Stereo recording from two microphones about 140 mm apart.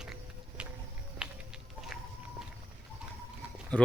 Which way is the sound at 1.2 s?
5° right (ahead or behind).